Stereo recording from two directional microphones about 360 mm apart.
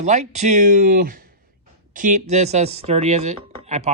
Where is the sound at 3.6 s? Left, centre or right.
Centre.